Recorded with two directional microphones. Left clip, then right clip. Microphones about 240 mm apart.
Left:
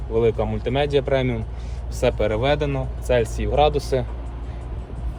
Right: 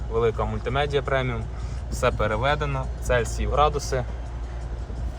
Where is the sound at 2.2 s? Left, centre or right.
Right.